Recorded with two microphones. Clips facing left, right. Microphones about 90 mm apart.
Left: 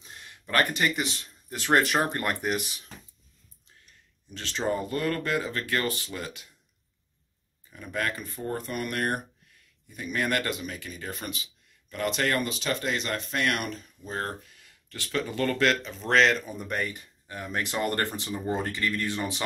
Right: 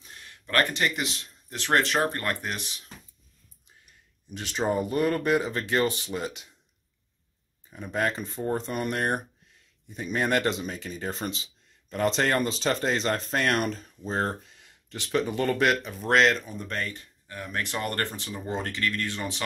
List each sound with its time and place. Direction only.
0.5 s speech: 5° left (ahead or behind)
3.8 s speech: 15° right (ahead or behind)
7.7 s speech: 25° right (ahead or behind)
16.0 s speech: 5° right (ahead or behind); by 19.2 s 10° left (ahead or behind)